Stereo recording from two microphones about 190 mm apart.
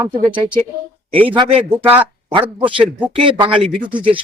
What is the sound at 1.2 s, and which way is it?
Speech, 25° right (ahead or behind).